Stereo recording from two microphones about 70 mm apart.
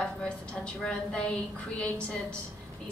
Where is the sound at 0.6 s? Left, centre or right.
Centre.